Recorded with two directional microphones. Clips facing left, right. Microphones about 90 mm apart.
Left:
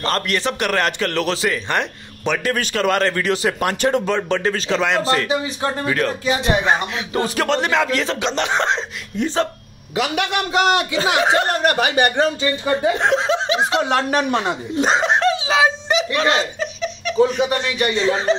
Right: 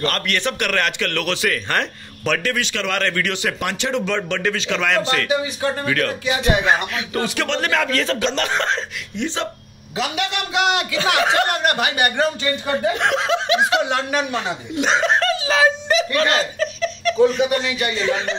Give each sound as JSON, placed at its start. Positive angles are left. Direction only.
{"t": 0.0, "sound": "a man's voice", "side_deg": 30}
{"t": 1.7, "sound": "a man's voice", "side_deg": 15}
{"t": 2.5, "sound": "speech", "side_deg": 40}
{"t": 6.2, "sound": "speech", "side_deg": 40}
{"t": 6.7, "sound": "speech", "side_deg": 25}
{"t": 7.6, "sound": "a man's voice", "side_deg": 20}
{"t": 9.9, "sound": "a man's voice", "side_deg": 60}
{"t": 10.5, "sound": "speech", "side_deg": 40}
{"t": 11.0, "sound": "a man's voice", "side_deg": 25}
{"t": 14.8, "sound": "giggle", "side_deg": 30}
{"t": 18.0, "sound": "speech", "side_deg": 30}